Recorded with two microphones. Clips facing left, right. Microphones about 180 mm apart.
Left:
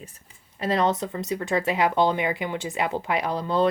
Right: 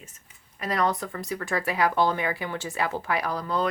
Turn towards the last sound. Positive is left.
turn(degrees=25)  # may be behind; listen again after turning